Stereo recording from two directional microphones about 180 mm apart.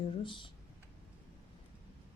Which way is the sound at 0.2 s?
25° left (ahead or behind).